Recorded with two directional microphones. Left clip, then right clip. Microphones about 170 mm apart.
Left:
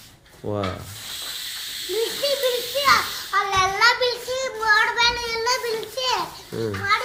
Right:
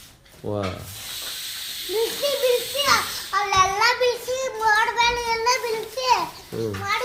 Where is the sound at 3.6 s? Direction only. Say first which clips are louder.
Left 1 dB; 90° right.